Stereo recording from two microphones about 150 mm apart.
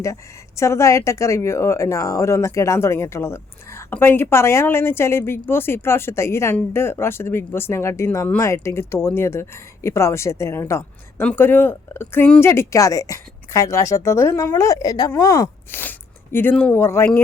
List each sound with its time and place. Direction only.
0.0 s a woman's voice: 20° left (ahead or behind)
15.8 s speech: 15° left (ahead or behind)